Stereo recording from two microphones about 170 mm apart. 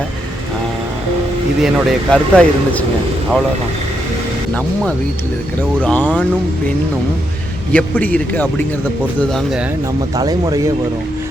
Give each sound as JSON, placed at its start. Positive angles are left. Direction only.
{"t": 1.6, "sound": "speech", "side_deg": 0}
{"t": 5.8, "sound": "a man's voice", "side_deg": 10}
{"t": 7.7, "sound": "a man's voice", "side_deg": 10}
{"t": 9.3, "sound": "speech", "side_deg": 0}
{"t": 10.2, "sound": "speech", "side_deg": -20}